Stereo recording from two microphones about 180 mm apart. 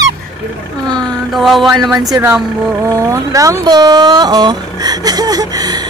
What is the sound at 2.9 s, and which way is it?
Speech, 15° right (ahead or behind).